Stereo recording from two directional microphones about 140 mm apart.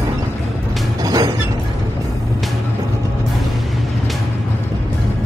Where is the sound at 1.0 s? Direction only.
30° right (ahead or behind).